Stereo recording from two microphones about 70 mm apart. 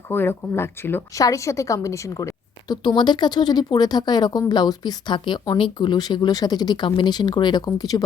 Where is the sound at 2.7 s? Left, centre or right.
Left.